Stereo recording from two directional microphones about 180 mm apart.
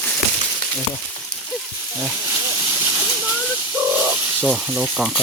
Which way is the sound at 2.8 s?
10° right (ahead or behind).